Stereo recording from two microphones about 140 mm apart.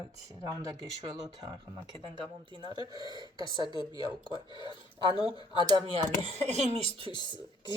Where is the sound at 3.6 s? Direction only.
30° left (ahead or behind).